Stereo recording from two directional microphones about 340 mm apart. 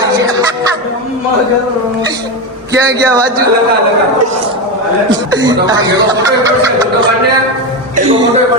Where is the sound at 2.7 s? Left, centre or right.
Centre.